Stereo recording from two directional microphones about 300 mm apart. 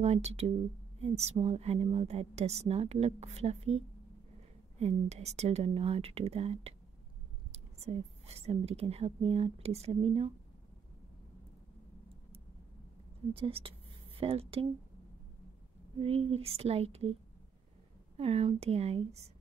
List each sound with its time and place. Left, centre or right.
0.0 s a woman's voice: right
13.3 s a woman's voice: centre
16.0 s a woman's voice: centre
18.1 s a woman's voice: centre